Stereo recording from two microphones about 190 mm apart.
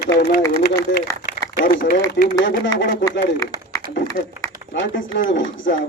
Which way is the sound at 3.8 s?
50° right (ahead or behind).